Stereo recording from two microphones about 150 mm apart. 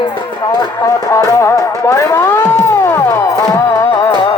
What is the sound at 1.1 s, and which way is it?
Music, 20° left (ahead or behind).